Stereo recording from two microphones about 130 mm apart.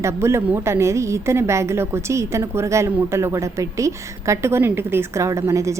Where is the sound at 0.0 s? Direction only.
20° right (ahead or behind).